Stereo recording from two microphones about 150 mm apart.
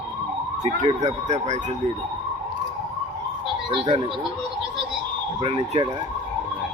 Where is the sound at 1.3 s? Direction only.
50° right (ahead or behind).